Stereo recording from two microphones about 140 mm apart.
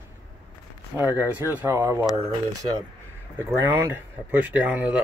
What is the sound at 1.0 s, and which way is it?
Speech, 15° right (ahead or behind).